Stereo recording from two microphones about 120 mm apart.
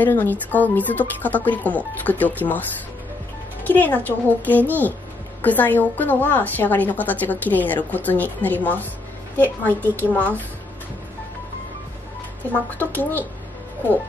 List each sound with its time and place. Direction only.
0.0 s a woman's voice: 15° left (ahead or behind)
3.6 s a woman's voice: 15° left (ahead or behind)
12.5 s a woman's voice: 15° left (ahead or behind)